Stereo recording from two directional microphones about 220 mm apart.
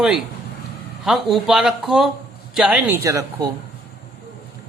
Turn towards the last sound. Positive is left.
turn(degrees=-15)  # may be behind; listen again after turning